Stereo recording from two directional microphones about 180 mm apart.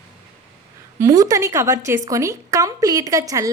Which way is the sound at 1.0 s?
20° right (ahead or behind).